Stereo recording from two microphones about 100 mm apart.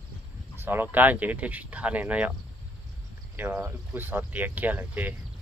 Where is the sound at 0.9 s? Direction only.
15° right (ahead or behind).